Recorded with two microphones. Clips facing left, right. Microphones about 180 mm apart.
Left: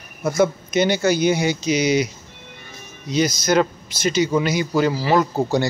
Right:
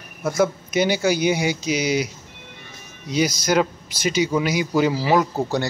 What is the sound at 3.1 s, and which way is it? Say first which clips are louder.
Speech: left 1 dB; 10° right (ahead or behind).